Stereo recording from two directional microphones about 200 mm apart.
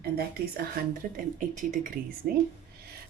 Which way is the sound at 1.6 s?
40° right (ahead or behind).